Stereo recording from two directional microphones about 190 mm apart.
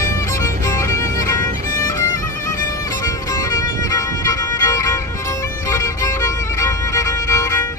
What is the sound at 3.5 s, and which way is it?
Music, 20° left (ahead or behind).